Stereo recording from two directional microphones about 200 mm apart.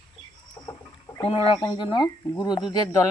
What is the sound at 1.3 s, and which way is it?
Speech, 20° left (ahead or behind).